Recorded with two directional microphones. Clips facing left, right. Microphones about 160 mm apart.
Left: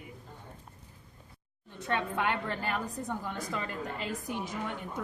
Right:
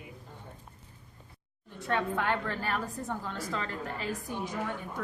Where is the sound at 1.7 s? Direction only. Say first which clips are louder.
Right 1 dB; 20° left (ahead or behind).